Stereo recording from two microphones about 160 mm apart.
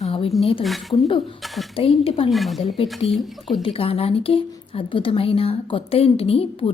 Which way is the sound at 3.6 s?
35° left (ahead or behind).